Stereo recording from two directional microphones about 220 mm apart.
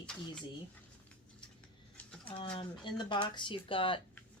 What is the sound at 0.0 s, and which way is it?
Speech, 5° left (ahead or behind).